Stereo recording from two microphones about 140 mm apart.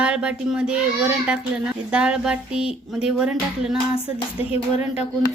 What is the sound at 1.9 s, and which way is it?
A woman's voice, 5° right (ahead or behind).